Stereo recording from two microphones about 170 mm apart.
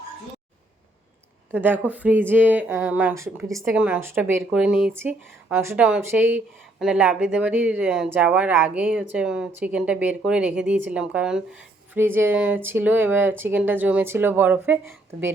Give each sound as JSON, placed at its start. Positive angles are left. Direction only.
{"t": 1.5, "sound": "speech", "side_deg": -10}